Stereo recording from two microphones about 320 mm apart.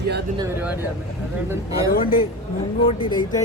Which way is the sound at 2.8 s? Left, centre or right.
Centre.